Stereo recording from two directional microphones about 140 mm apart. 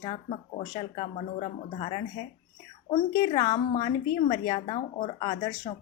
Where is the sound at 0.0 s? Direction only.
45° left (ahead or behind).